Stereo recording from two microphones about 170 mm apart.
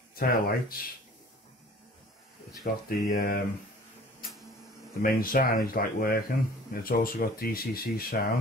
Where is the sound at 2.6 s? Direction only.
55° left (ahead or behind).